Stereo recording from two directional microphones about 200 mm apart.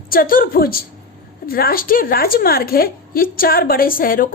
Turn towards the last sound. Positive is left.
turn(degrees=45)  # may be behind; listen again after turning